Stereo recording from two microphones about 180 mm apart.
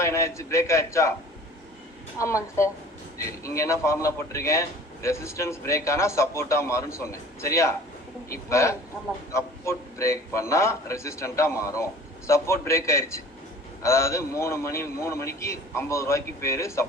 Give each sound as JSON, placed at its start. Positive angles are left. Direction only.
{"t": 0.0, "sound": "a man's voice", "side_deg": 15}
{"t": 2.1, "sound": "a man's voice", "side_deg": 15}